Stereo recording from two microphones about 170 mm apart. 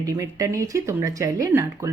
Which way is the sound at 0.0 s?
20° right (ahead or behind).